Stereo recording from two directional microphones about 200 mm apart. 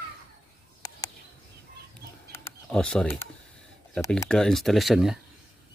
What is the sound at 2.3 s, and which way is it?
Mechanisms, 10° left (ahead or behind).